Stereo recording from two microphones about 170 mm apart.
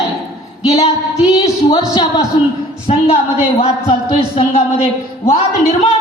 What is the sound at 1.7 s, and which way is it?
Speech, 25° left (ahead or behind).